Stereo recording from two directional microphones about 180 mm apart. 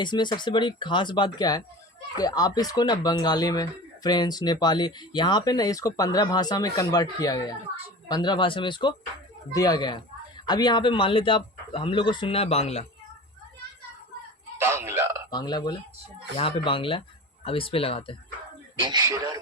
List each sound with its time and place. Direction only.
0.0 s speech: 25° left (ahead or behind)
14.6 s a sound: 15° right (ahead or behind)
15.3 s speech: 25° left (ahead or behind)
18.8 s speech: 25° right (ahead or behind)